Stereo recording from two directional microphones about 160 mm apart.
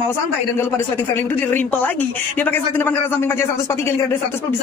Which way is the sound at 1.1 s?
10° left (ahead or behind).